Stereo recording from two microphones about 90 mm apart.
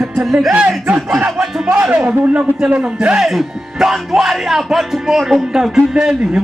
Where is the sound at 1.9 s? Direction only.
15° right (ahead or behind).